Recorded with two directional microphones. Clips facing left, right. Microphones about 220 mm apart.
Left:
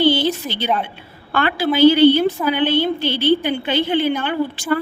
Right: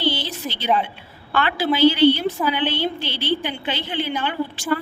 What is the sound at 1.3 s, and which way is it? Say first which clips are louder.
A woman's voice: left 2 dB; 50° left (ahead or behind).